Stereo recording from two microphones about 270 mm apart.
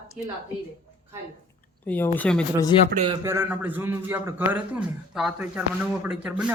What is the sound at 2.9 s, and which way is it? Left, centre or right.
Speech, right.